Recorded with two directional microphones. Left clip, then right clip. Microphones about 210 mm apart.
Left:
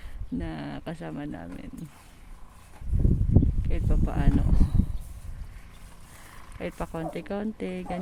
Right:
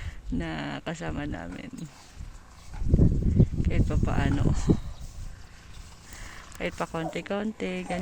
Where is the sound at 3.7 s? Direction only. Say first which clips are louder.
Right 3 dB; 5° left (ahead or behind).